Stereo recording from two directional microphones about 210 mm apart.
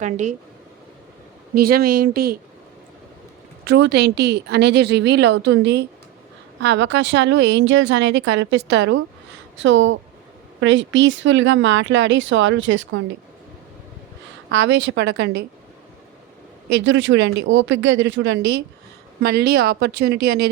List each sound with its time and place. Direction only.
0.0 s speech: 35° right (ahead or behind)
1.5 s a woman's voice: 45° right (ahead or behind)
3.6 s a woman's voice: 55° right (ahead or behind)
14.5 s speech: 55° right (ahead or behind)
16.8 s speech: 60° right (ahead or behind)
19.2 s a woman's voice: 50° right (ahead or behind)